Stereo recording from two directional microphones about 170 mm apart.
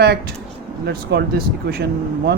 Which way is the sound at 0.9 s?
75° right (ahead or behind).